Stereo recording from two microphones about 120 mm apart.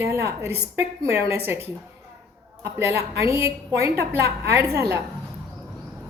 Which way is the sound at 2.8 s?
25° right (ahead or behind).